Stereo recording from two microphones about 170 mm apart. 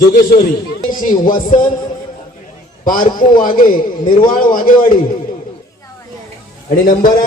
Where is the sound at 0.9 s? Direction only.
55° left (ahead or behind).